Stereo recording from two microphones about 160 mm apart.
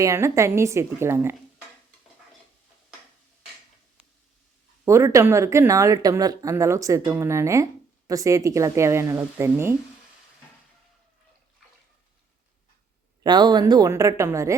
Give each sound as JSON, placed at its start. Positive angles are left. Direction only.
{"t": 0.0, "sound": "a woman's voice", "side_deg": -20}
{"t": 4.9, "sound": "speech", "side_deg": -20}
{"t": 13.2, "sound": "speech", "side_deg": -25}